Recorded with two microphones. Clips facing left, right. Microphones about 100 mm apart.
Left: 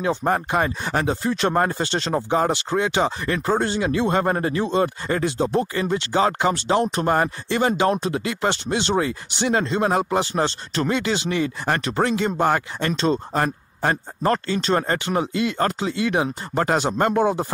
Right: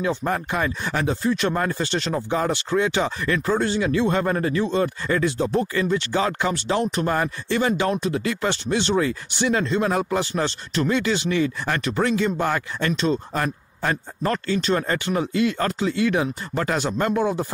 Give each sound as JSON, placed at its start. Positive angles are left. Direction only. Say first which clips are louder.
{"t": 0.0, "sound": "speech", "louder": "left 2 dB", "side_deg": 30}